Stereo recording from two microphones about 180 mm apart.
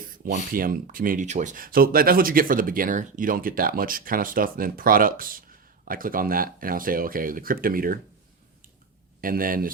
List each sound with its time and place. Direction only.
0.3 s speech: 45° right (ahead or behind)
9.2 s speech: 50° right (ahead or behind)